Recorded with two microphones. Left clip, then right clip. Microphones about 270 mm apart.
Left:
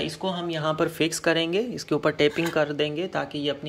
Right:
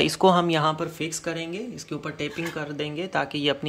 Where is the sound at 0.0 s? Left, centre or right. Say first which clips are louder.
Right 10 dB; centre.